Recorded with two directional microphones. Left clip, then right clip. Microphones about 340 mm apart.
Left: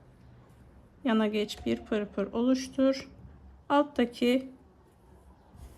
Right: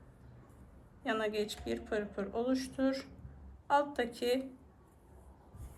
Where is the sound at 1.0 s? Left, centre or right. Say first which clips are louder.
Left 5 dB; centre.